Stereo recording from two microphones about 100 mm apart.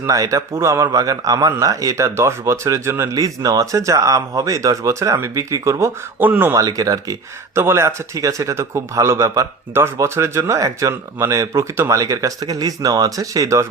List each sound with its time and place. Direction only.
0.0 s a man's voice: 35° right (ahead or behind)
6.1 s speech: 20° right (ahead or behind)
6.5 s a man's voice: 35° right (ahead or behind)